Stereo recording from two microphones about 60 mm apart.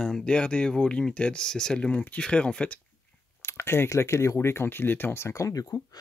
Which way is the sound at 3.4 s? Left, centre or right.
Left.